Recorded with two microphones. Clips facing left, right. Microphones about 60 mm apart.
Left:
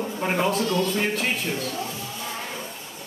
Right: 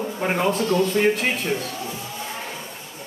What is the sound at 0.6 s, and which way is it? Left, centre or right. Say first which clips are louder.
Speech: right 3 dB; right.